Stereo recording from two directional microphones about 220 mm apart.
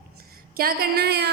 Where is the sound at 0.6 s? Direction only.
45° right (ahead or behind).